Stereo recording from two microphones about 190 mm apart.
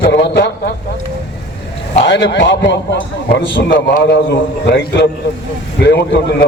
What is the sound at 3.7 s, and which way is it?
Speech, 45° left (ahead or behind).